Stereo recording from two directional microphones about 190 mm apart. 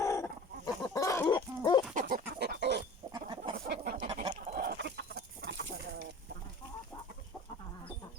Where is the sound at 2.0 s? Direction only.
50° right (ahead or behind); by 2.8 s 65° right (ahead or behind).